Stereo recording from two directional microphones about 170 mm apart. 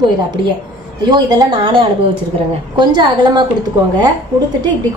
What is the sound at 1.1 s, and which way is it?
A woman's voice, 25° right (ahead or behind).